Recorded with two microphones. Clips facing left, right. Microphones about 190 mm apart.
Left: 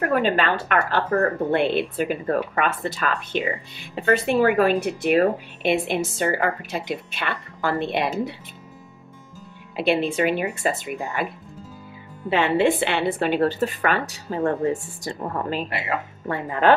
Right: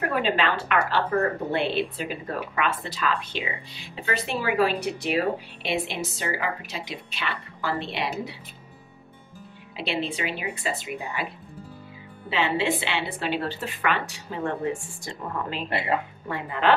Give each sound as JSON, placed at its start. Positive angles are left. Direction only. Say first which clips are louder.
{"t": 0.1, "sound": "speech", "louder": "left 4 dB", "side_deg": 45}
{"t": 9.8, "sound": "speech", "louder": "left 8 dB", "side_deg": 50}
{"t": 12.3, "sound": "speech", "louder": "left 6 dB", "side_deg": 50}